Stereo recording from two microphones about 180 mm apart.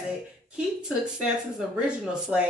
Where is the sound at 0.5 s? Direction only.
5° right (ahead or behind).